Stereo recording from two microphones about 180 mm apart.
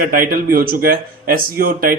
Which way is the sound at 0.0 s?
50° right (ahead or behind).